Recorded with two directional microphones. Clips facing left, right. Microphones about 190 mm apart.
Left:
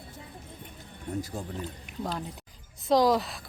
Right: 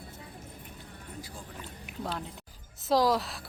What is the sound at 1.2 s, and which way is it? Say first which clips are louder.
Speech: left 8 dB; 45° left (ahead or behind).